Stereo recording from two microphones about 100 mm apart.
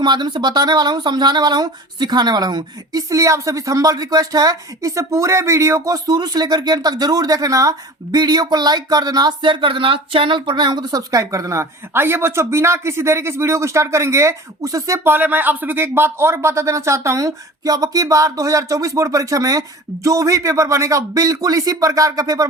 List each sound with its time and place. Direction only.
0.0 s speech: 45° right (ahead or behind)